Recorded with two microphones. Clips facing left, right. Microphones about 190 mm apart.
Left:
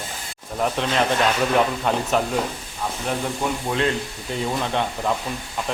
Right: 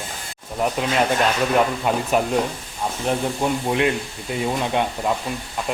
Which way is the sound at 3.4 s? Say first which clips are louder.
Right 3 dB; 20° right (ahead or behind).